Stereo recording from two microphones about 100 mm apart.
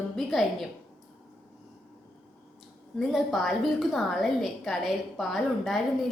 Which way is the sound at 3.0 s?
Centre (ahead or behind).